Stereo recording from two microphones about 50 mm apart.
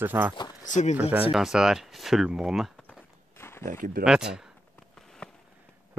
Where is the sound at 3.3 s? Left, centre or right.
Left.